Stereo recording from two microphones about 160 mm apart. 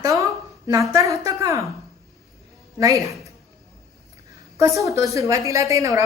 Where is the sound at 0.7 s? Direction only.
20° right (ahead or behind).